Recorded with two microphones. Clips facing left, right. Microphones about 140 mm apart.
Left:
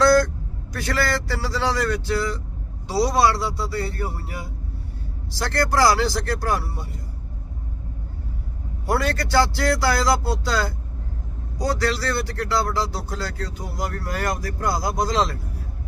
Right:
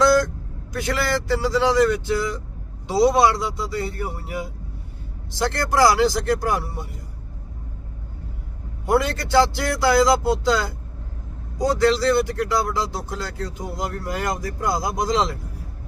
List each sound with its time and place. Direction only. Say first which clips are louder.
0.0 s vehicle: left 1 dB; 15° right (ahead or behind)
0.7 s a man's voice: right 1 dB; 20° right (ahead or behind)
8.9 s speech: right 2 dB; 20° right (ahead or behind)